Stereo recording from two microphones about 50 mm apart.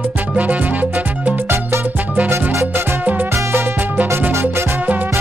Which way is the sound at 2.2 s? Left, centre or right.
Right.